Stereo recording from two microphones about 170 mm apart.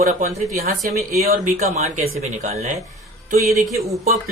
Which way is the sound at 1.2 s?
60° right (ahead or behind).